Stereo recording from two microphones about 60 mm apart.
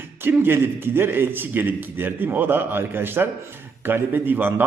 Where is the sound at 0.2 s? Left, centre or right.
Right.